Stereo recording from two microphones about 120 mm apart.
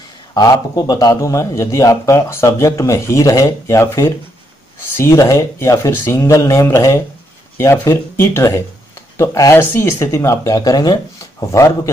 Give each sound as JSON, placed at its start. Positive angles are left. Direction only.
{"t": 0.3, "sound": "a man's voice", "side_deg": 35}